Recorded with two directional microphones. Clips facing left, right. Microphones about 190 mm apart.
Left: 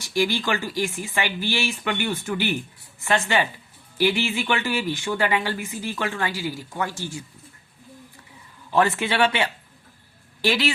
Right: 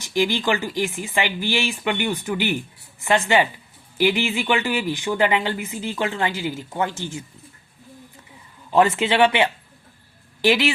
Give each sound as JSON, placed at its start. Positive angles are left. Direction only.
{"t": 0.0, "sound": "speech", "side_deg": -15}
{"t": 8.7, "sound": "speech", "side_deg": -15}